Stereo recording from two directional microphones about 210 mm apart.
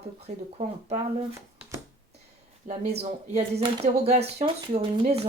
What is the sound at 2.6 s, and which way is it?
Speech, 30° right (ahead or behind).